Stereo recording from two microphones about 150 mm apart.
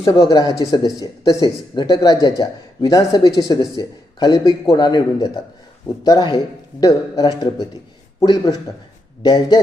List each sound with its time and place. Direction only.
0.0 s speech: 25° left (ahead or behind)